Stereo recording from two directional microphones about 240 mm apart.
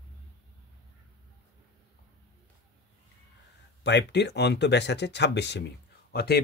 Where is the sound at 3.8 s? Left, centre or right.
Left.